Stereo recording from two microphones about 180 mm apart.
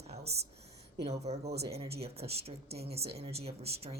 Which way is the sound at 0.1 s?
35° right (ahead or behind).